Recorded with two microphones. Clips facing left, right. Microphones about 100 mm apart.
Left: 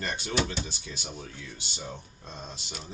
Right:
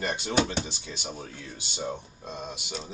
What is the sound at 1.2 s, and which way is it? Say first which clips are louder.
Speech: right 2 dB; 45° right (ahead or behind).